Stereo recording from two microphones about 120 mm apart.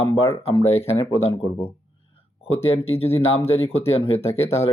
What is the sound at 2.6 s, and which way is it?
Speech, 55° left (ahead or behind).